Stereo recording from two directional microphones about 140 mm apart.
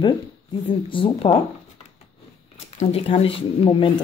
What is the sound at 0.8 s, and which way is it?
Female singing, 35° left (ahead or behind).